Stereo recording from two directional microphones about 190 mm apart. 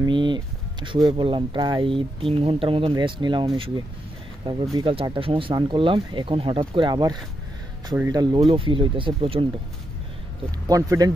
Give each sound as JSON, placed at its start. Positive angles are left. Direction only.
{"t": 0.0, "sound": "speech", "side_deg": -25}
{"t": 10.7, "sound": "speech", "side_deg": -20}